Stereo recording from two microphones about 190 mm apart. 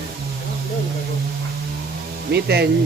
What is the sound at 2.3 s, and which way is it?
Speech, 60° right (ahead or behind).